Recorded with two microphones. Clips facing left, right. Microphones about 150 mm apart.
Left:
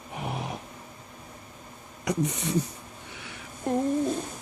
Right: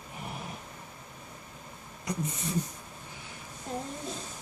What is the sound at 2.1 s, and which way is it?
Speech, 75° left (ahead or behind).